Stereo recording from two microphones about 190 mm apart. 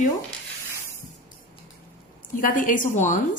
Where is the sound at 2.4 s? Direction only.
45° left (ahead or behind).